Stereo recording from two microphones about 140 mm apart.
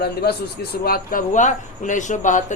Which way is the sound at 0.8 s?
90° left.